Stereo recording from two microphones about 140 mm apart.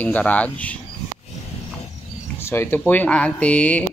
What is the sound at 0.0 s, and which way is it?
Speech, 10° left (ahead or behind).